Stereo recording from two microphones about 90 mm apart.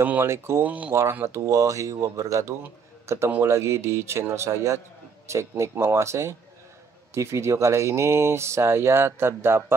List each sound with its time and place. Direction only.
0.0 s speech: 25° right (ahead or behind)
0.7 s speech: 15° right (ahead or behind)
1.2 s a man's voice: 35° right (ahead or behind)